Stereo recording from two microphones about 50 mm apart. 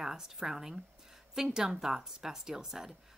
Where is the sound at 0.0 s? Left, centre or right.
Centre.